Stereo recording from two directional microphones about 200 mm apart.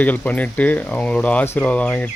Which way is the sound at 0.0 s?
10° left (ahead or behind).